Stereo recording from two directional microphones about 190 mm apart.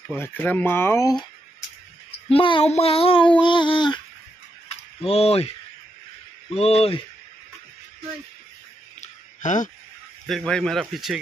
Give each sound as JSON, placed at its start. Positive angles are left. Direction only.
{"t": 0.1, "sound": "speech", "side_deg": 10}
{"t": 2.2, "sound": "speech", "side_deg": 30}
{"t": 5.0, "sound": "speech", "side_deg": 30}
{"t": 6.5, "sound": "speech", "side_deg": 35}
{"t": 9.0, "sound": "a sound", "side_deg": 40}
{"t": 10.2, "sound": "speech", "side_deg": 5}